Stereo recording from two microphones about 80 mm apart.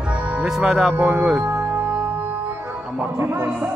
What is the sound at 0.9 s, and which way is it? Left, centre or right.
Speech, right.